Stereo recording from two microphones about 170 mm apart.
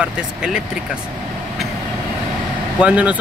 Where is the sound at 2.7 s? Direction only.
5° right (ahead or behind).